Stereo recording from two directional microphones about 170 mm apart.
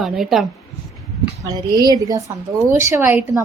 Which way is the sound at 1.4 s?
25° right (ahead or behind).